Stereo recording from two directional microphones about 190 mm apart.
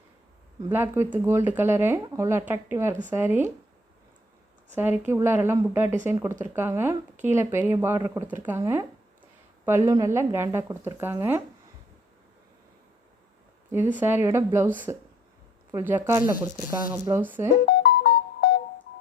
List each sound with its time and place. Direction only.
0.7 s a woman's voice: 10° right (ahead or behind)
4.7 s a woman's voice: 10° right (ahead or behind)
13.7 s a woman's voice: 10° right (ahead or behind)
17.7 s music: 55° left (ahead or behind)